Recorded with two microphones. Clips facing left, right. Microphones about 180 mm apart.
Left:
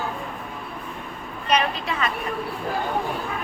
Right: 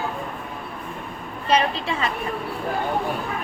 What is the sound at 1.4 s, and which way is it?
Speech, 30° right (ahead or behind).